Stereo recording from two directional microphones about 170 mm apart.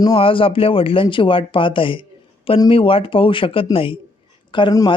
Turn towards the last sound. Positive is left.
turn(degrees=25)  # may be behind; listen again after turning